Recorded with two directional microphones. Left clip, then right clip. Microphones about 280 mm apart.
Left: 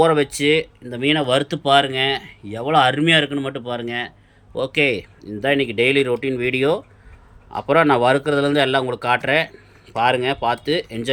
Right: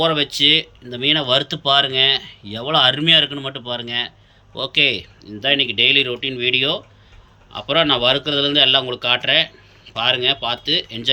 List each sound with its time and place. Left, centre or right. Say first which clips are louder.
0.0 s speech: even; centre